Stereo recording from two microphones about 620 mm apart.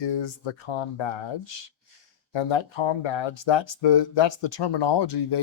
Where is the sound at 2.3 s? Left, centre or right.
Left.